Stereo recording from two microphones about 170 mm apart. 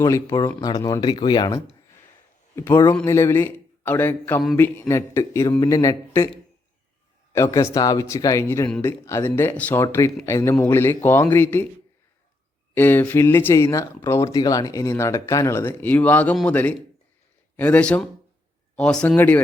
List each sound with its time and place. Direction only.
0.0 s speech: 15° left (ahead or behind)
7.3 s speech: 15° left (ahead or behind)
12.7 s speech: 10° left (ahead or behind)